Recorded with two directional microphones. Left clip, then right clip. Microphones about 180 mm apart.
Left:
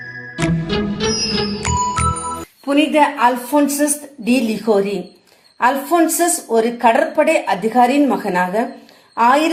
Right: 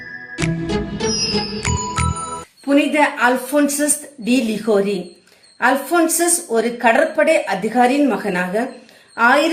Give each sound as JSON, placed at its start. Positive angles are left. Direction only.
{"t": 1.0, "sound": "music", "side_deg": 0}
{"t": 2.6, "sound": "a woman's voice", "side_deg": 25}